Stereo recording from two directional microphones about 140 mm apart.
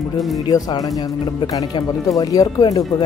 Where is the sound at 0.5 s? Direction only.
25° left (ahead or behind).